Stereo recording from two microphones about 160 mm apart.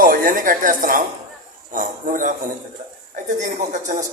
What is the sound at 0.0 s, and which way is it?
A woman's voice, 60° right (ahead or behind).